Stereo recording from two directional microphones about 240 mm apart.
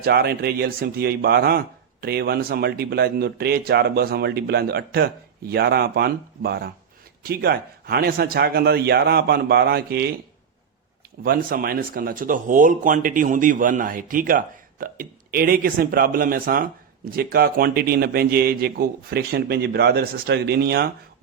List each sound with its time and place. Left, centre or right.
0.0 s speech: right
11.2 s speech: right